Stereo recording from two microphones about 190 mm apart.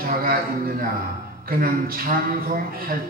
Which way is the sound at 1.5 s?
50° right (ahead or behind).